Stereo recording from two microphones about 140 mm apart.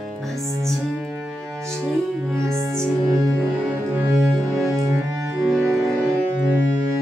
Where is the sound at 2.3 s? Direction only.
20° right (ahead or behind).